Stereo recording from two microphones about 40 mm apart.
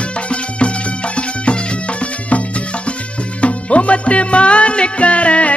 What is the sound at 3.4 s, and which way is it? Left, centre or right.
Music, left.